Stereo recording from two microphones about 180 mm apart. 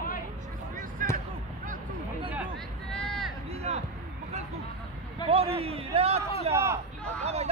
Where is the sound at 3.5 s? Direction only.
35° right (ahead or behind).